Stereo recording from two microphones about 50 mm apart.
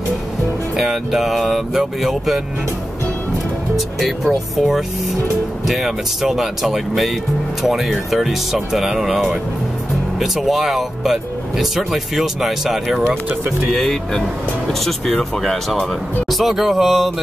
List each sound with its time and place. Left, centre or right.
0.7 s speech: centre
3.7 s speech: centre
13.7 s speech: centre